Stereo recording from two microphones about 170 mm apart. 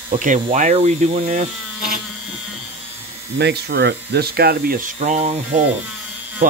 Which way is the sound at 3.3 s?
80° right.